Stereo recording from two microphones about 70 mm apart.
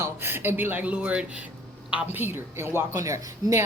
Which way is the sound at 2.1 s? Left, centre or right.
Right.